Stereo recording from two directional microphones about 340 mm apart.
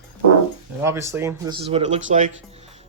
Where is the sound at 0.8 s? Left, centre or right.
Centre.